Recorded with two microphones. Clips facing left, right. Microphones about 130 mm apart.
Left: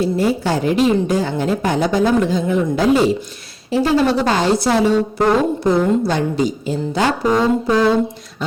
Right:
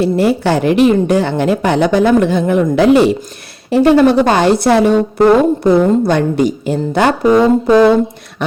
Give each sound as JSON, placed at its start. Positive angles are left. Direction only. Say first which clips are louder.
{"t": 0.0, "sound": "a woman's voice", "louder": "right 5 dB", "side_deg": -70}